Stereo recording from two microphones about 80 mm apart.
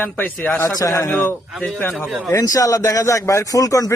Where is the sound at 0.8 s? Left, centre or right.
Left.